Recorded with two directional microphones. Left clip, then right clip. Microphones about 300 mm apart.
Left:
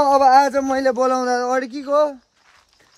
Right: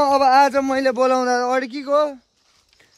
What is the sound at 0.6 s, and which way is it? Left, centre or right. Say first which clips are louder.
Speech: even; centre.